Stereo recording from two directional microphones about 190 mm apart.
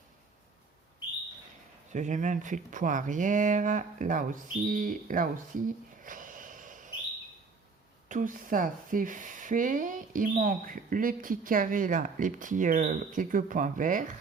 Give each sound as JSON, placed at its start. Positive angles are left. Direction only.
{"t": 1.9, "sound": "speech", "side_deg": -40}
{"t": 8.0, "sound": "speech", "side_deg": -45}